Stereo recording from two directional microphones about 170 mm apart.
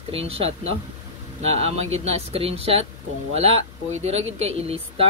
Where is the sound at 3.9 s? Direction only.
40° right (ahead or behind).